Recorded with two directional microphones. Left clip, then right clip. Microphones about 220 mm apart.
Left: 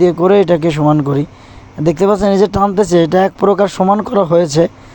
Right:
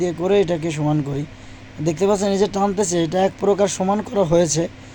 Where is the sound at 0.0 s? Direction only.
25° left (ahead or behind).